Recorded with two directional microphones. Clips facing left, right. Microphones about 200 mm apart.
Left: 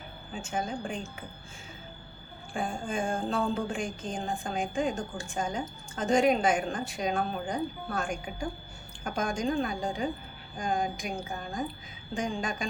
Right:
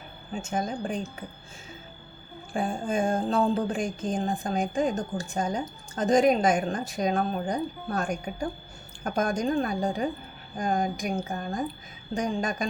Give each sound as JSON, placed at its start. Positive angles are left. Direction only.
{"t": 0.5, "sound": "a woman's voice", "side_deg": -40}
{"t": 2.5, "sound": "a woman's voice", "side_deg": -35}